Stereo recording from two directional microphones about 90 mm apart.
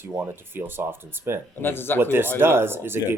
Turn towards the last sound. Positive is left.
turn(degrees=-25)  # may be behind; listen again after turning